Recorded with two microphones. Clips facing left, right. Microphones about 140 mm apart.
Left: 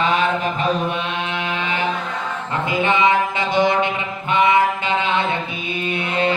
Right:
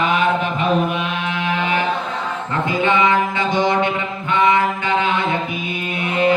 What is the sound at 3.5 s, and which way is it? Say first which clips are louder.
Mantra: left 1 dB; 20° right (ahead or behind).